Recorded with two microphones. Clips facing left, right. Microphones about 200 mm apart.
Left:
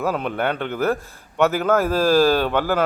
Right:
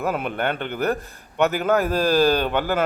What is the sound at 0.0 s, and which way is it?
Speech, 5° right (ahead or behind).